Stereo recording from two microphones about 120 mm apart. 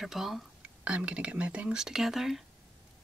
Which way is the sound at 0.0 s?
Centre (ahead or behind).